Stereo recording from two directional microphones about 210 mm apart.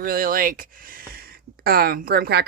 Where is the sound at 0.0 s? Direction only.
45° right (ahead or behind).